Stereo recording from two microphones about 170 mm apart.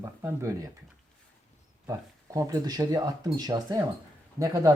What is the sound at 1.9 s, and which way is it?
A man's voice, 20° right (ahead or behind).